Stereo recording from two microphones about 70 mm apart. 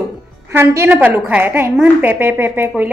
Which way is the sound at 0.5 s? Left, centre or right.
Right.